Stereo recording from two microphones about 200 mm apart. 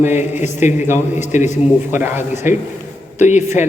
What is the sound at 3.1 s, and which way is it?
Speech, 35° left (ahead or behind).